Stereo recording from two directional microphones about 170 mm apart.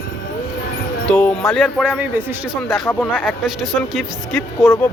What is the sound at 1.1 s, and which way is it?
Speech, 5° left (ahead or behind).